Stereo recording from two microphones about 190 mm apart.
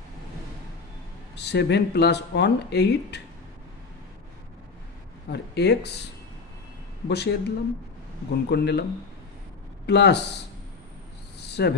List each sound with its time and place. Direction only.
1.3 s speech: 60° left (ahead or behind)
5.3 s speech: 60° left (ahead or behind)
7.1 s speech: 60° left (ahead or behind)
9.8 s speech: 60° left (ahead or behind)
11.3 s a sound: 60° left (ahead or behind)